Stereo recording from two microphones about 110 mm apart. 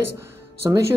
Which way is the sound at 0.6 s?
35° right (ahead or behind).